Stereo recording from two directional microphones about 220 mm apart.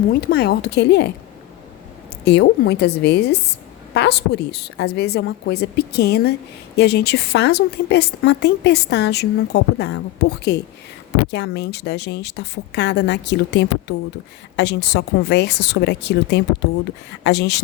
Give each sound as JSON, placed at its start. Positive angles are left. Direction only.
{"t": 0.1, "sound": "a woman's voice", "side_deg": 45}
{"t": 2.2, "sound": "a woman's voice", "side_deg": 50}